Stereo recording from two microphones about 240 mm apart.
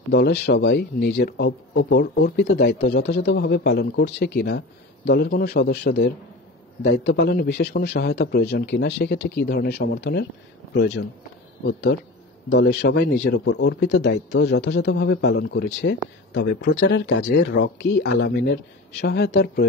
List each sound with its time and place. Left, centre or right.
0.1 s a man's voice: left